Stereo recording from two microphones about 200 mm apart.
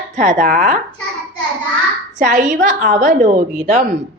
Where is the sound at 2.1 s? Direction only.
40° right (ahead or behind).